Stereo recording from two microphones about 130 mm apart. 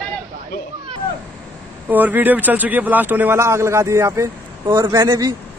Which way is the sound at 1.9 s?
15° right (ahead or behind).